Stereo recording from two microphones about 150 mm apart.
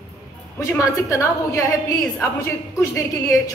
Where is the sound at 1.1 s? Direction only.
20° left (ahead or behind).